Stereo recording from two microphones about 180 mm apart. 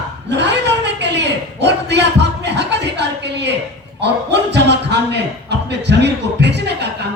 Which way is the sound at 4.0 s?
70° right (ahead or behind).